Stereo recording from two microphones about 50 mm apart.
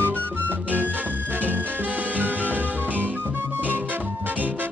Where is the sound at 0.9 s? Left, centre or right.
Right.